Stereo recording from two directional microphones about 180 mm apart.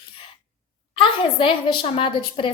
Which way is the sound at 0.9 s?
30° left (ahead or behind).